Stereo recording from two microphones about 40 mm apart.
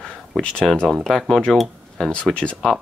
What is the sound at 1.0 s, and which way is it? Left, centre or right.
Speech, centre.